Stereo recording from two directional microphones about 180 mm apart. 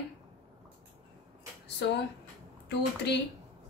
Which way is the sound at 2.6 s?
70° left (ahead or behind).